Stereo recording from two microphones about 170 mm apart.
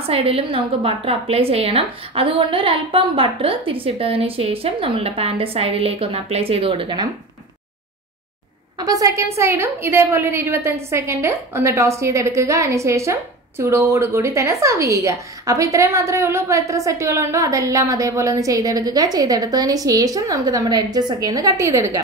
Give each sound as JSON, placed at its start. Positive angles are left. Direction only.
{"t": 0.0, "sound": "a woman's voice", "side_deg": -35}
{"t": 8.7, "sound": "a woman's voice", "side_deg": -20}